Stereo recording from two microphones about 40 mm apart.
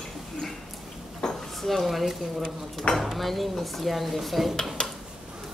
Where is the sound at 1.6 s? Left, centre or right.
Centre.